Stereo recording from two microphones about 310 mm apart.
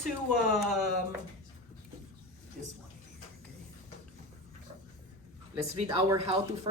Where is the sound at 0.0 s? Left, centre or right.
Centre.